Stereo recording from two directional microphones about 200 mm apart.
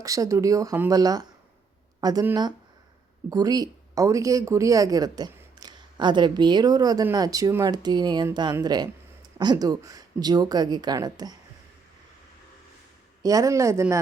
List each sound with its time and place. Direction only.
0.0 s a woman's voice: 15° right (ahead or behind)
13.2 s speech: 15° right (ahead or behind)